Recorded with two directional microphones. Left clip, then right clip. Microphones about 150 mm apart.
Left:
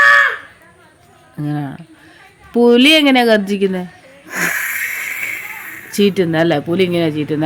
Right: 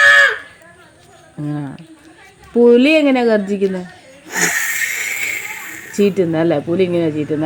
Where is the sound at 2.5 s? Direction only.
40° left (ahead or behind).